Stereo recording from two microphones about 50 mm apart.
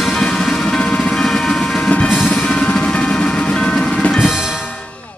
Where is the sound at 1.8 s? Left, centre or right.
Left.